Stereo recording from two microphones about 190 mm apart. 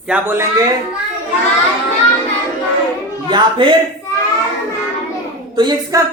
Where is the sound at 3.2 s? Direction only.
25° right (ahead or behind).